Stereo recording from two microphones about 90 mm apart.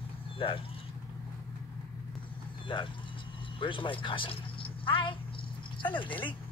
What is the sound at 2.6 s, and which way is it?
Speech, 65° left (ahead or behind).